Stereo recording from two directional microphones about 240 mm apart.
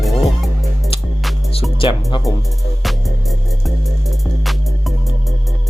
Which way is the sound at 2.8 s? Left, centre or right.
Centre.